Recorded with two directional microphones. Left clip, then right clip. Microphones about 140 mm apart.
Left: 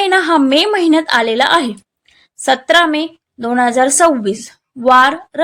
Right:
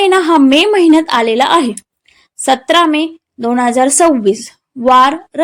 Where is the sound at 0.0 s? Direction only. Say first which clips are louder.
Right 3 dB; 20° right (ahead or behind).